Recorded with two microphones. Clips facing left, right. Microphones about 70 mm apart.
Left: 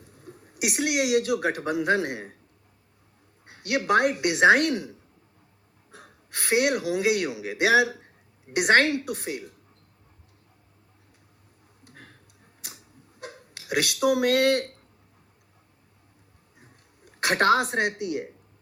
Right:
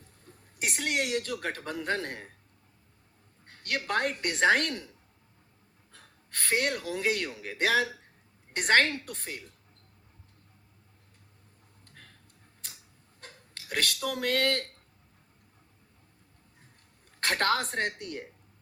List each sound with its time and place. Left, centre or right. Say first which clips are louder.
0.2 s speech: left 5 dB; centre
3.4 s a sound: left 5 dB; centre
3.8 s a woman's voice: left 8 dB; centre
5.9 s a woman's voice: left 4 dB; centre
11.9 s tick-tock: left 6 dB; centre
13.5 s speech: left 5 dB; centre
17.1 s a woman's voice: left 7 dB; centre